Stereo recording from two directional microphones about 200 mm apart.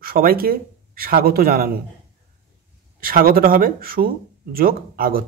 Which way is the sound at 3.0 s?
45° right (ahead or behind).